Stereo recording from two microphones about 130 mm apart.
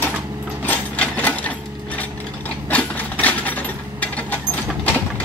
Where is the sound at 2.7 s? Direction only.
10° left (ahead or behind).